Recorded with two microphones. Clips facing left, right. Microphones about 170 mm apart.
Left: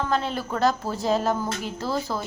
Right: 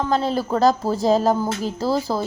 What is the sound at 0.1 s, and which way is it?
Speech, 35° right (ahead or behind).